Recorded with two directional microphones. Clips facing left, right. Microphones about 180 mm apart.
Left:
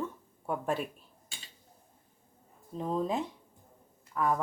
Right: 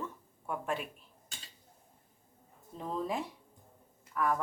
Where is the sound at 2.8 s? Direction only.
20° left (ahead or behind).